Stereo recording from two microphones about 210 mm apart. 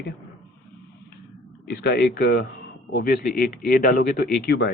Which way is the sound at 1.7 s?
50° left (ahead or behind).